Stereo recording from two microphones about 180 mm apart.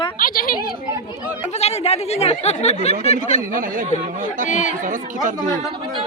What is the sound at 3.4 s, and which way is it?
Speech, 50° right (ahead or behind).